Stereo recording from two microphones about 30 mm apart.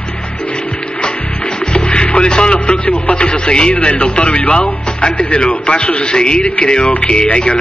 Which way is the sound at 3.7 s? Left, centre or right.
Left.